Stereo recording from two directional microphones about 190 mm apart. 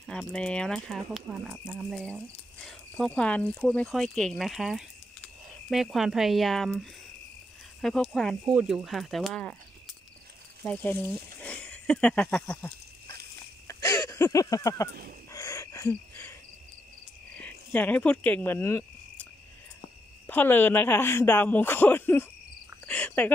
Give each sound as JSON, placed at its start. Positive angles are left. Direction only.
{"t": 0.0, "sound": "speech", "side_deg": 5}
{"t": 10.6, "sound": "speech", "side_deg": 10}
{"t": 11.4, "sound": "a sound", "side_deg": 5}
{"t": 13.7, "sound": "a sound", "side_deg": 15}
{"t": 15.3, "sound": "cricket", "side_deg": 15}
{"t": 17.4, "sound": "speech", "side_deg": 10}
{"t": 20.2, "sound": "speech", "side_deg": 10}
{"t": 22.8, "sound": "cricket", "side_deg": 10}